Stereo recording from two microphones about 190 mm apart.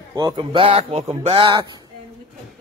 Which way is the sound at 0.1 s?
25° right (ahead or behind).